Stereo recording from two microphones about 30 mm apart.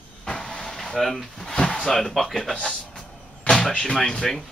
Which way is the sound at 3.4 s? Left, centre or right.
Left.